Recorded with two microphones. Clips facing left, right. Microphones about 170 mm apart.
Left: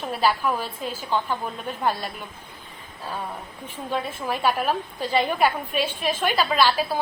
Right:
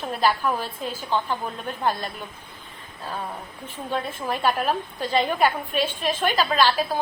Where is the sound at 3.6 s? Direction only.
10° left (ahead or behind).